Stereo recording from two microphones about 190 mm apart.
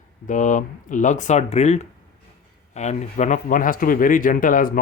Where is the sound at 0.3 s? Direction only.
40° left (ahead or behind).